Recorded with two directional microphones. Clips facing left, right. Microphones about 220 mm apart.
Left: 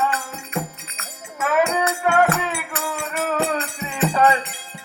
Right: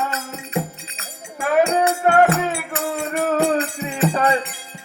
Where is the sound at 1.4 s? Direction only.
35° right (ahead or behind).